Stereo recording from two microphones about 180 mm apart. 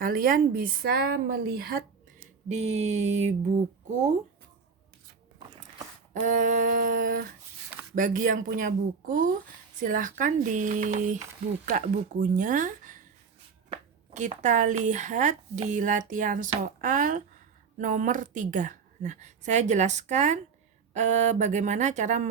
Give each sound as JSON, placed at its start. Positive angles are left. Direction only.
{"t": 0.0, "sound": "a woman's voice", "side_deg": -50}
{"t": 2.5, "sound": "a woman's voice", "side_deg": -35}
{"t": 6.1, "sound": "a woman's voice", "side_deg": -45}